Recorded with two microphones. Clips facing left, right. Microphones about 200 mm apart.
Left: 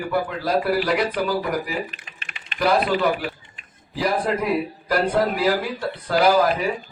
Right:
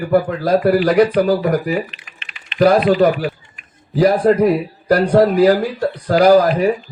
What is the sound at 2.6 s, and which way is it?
Speech, 45° right (ahead or behind).